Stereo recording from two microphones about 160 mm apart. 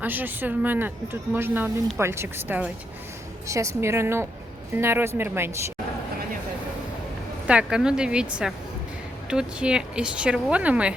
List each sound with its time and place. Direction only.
0.0 s speech: 10° right (ahead or behind)
7.4 s speech: 5° right (ahead or behind)